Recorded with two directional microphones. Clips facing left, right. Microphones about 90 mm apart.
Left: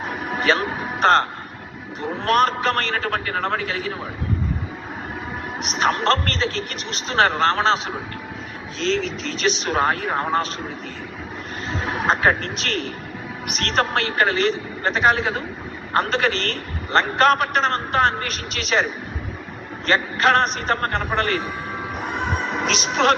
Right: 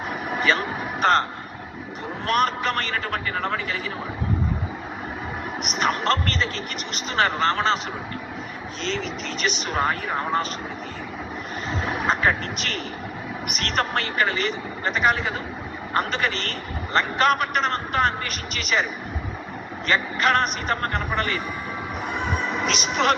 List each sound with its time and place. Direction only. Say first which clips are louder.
0.3 s a man's voice: left 3 dB; 40° left (ahead or behind)
5.7 s a man's voice: left 3 dB; 35° left (ahead or behind)
9.2 s a man's voice: left 4 dB; 40° left (ahead or behind)
12.0 s a man's voice: left 4 dB; 40° left (ahead or behind)
19.9 s a man's voice: left 3 dB; 40° left (ahead or behind)
22.6 s a man's voice: left 3 dB; 35° left (ahead or behind)